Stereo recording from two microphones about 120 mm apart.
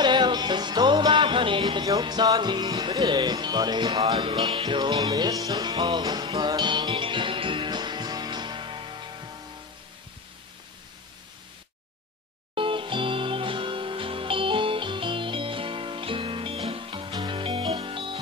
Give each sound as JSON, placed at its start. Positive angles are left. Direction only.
{"t": 0.0, "sound": "music", "side_deg": -40}
{"t": 12.5, "sound": "music", "side_deg": -45}